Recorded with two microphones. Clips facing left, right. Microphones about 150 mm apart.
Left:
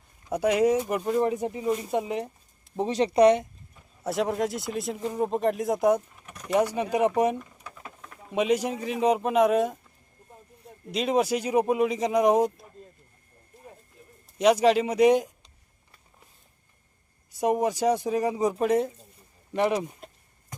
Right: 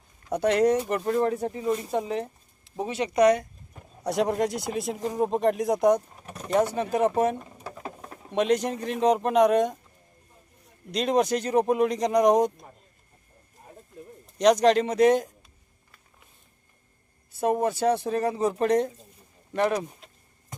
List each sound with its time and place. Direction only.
0.3 s speech: 10° left (ahead or behind)
2.8 s speech: 30° left (ahead or behind)
4.0 s speech: centre (ahead or behind)
6.1 s pigeon: 35° right (ahead or behind)
6.5 s speech: 10° left (ahead or behind)
7.3 s a sound: 35° right (ahead or behind)
8.3 s speech: 5° left (ahead or behind)
10.9 s speech: 5° left (ahead or behind)
14.3 s speech: 5° left (ahead or behind)
17.4 s speech: 15° left (ahead or behind)